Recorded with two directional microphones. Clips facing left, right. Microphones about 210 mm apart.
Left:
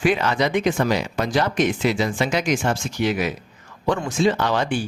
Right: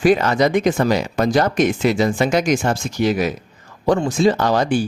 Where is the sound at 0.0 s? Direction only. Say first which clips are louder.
Right 5 dB; 40° right (ahead or behind).